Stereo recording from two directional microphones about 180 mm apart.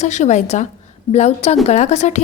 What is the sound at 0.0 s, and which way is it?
A woman's voice, 40° left (ahead or behind).